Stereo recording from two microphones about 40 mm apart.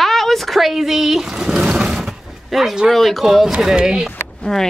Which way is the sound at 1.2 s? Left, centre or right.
Centre.